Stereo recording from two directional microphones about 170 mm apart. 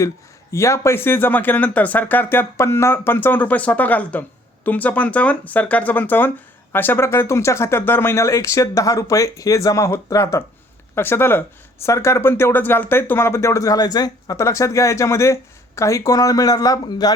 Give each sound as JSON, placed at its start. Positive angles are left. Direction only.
{"t": 0.5, "sound": "speech", "side_deg": 15}